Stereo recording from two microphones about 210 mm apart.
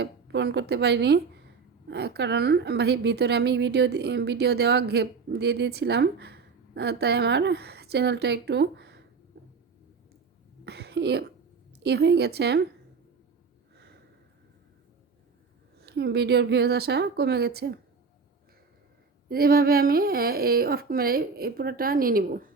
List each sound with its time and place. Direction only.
0.0 s a woman's voice: 55° right (ahead or behind)
10.7 s a woman's voice: 50° right (ahead or behind)
15.8 s a woman's voice: 50° right (ahead or behind)
19.3 s a woman's voice: 45° right (ahead or behind)